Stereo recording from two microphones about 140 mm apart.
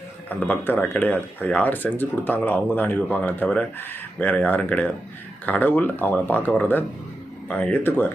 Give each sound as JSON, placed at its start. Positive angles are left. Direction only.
{"t": 0.3, "sound": "speech", "side_deg": 10}